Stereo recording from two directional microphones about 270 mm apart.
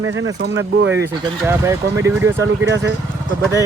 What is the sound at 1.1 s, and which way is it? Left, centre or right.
Speech, centre.